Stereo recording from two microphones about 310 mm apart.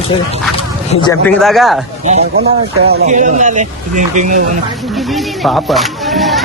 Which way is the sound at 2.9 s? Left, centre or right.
Right.